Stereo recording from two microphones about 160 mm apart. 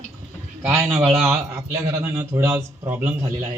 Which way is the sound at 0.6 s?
15° right (ahead or behind).